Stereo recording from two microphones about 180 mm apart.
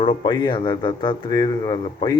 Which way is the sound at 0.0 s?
25° left (ahead or behind).